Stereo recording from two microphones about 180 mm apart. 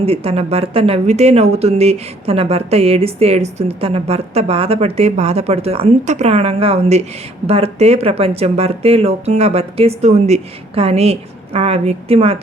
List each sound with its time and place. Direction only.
0.0 s speech: 35° right (ahead or behind)